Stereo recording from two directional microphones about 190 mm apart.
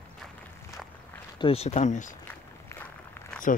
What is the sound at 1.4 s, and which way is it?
Speech, 35° left (ahead or behind).